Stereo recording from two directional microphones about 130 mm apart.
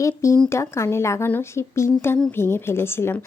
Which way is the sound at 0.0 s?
25° left (ahead or behind).